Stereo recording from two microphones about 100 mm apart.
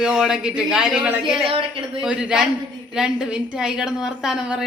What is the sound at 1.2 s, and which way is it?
Speech, 60° right (ahead or behind).